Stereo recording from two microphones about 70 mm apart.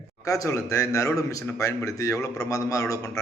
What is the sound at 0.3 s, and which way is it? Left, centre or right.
A man's voice, left.